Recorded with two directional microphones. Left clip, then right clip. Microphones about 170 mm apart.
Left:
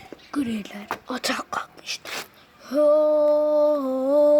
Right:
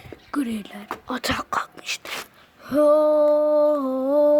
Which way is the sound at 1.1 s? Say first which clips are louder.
Right 3 dB; 10° right (ahead or behind).